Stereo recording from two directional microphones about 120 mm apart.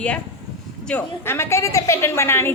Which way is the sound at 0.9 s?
20° left (ahead or behind).